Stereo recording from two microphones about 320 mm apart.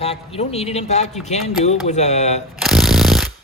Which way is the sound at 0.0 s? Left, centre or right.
Centre.